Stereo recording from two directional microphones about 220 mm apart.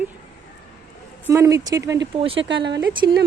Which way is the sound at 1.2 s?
15° right (ahead or behind).